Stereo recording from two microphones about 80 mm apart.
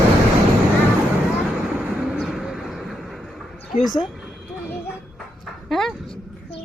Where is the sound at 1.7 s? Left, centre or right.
Centre.